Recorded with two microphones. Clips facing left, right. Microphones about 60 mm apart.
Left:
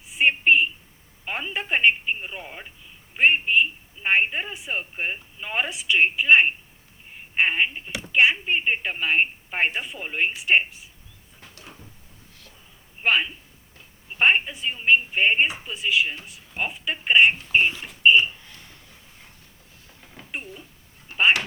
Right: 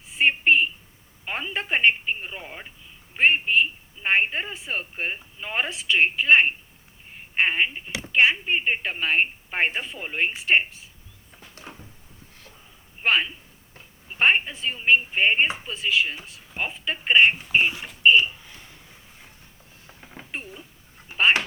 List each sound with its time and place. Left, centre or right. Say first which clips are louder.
0.2 s a sound: left 1 dB; centre
1.2 s a woman's voice: even; centre
5.7 s a woman's voice: left 1 dB; centre
13.0 s a woman's voice: even; centre
15.7 s a woman's voice: even; centre
19.9 s a sound: right 3 dB; right
21.1 s dog: even; centre